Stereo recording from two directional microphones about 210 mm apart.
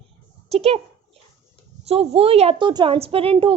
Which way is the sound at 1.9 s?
30° right (ahead or behind).